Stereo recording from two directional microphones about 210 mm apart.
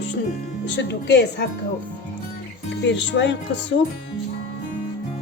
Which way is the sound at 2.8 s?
60° left (ahead or behind).